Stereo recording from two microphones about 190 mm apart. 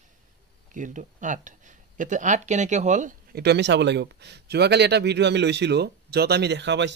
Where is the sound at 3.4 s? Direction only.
65° right (ahead or behind).